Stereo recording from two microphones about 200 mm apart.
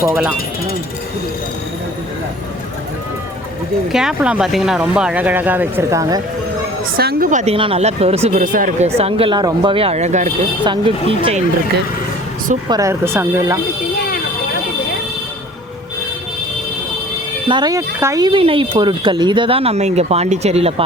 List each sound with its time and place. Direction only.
0.0 s speech: 15° right (ahead or behind)
3.9 s speech: 5° right (ahead or behind)
6.9 s speech: 50° right (ahead or behind)
9.0 s speech: 30° right (ahead or behind)
10.6 s speech: 25° right (ahead or behind)
12.6 s speech: 15° right (ahead or behind)
17.5 s speech: 20° right (ahead or behind)